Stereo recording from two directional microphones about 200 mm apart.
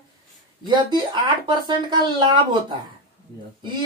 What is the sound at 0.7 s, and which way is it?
Speech, 20° right (ahead or behind).